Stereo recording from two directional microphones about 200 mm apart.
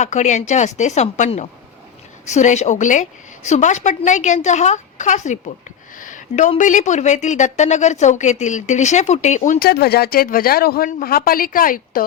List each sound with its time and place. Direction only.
0.0 s a woman's voice: 35° left (ahead or behind)